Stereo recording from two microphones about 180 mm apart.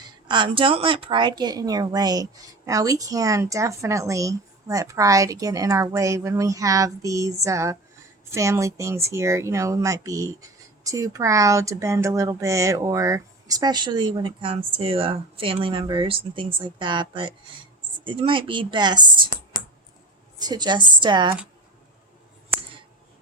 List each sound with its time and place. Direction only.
0.3 s speech: 25° right (ahead or behind)
20.4 s speech: 25° right (ahead or behind)